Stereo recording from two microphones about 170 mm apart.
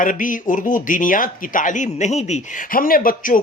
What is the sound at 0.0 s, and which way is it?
Speech, 50° left (ahead or behind).